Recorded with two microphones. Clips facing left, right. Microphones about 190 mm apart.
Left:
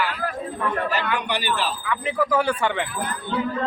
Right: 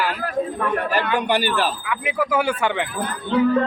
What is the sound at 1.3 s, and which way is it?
Speech, 45° right (ahead or behind).